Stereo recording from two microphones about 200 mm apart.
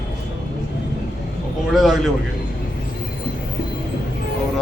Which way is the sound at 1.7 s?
Centre (ahead or behind).